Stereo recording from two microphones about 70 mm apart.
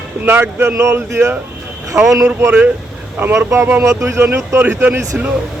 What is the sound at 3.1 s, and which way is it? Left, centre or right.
Speech, right.